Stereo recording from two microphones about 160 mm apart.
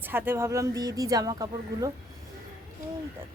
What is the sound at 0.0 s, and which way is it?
Speech, 10° right (ahead or behind).